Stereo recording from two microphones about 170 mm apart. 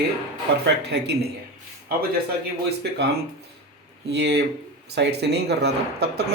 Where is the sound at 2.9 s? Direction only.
75° right (ahead or behind).